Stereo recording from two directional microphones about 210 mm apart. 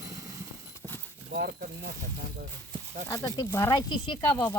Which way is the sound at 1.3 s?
50° right (ahead or behind).